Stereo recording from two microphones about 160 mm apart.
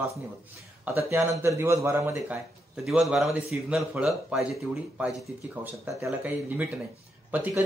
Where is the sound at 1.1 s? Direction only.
15° right (ahead or behind).